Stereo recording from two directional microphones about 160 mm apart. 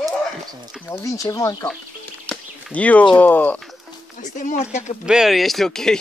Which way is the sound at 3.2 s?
10° left (ahead or behind).